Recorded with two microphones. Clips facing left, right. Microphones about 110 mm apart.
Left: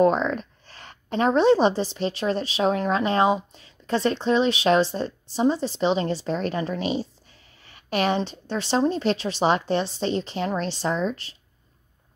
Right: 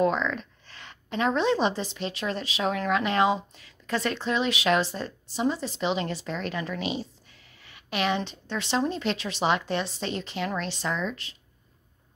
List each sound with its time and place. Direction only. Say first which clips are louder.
0.0 s a woman's voice: left 5 dB; 40° left (ahead or behind)